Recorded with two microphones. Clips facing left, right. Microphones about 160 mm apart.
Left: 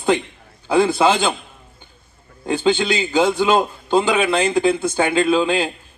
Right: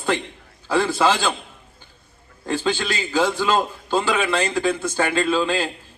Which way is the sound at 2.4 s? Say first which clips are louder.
Left 5 dB; 20° left (ahead or behind).